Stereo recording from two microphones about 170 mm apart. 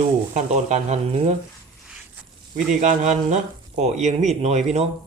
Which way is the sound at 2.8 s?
45° right (ahead or behind).